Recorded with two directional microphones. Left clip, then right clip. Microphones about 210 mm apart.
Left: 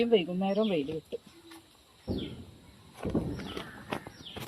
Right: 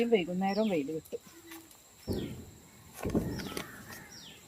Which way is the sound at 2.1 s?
60° right (ahead or behind).